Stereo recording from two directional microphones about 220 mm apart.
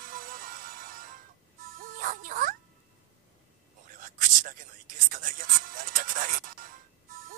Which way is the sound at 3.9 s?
35° right (ahead or behind).